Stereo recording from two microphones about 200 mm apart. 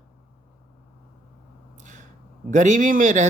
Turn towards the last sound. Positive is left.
turn(degrees=-40)  # may be behind; listen again after turning